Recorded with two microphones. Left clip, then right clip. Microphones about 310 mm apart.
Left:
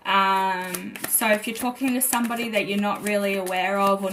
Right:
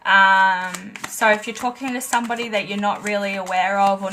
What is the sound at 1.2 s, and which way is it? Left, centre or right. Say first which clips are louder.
Speech: right 5 dB; right.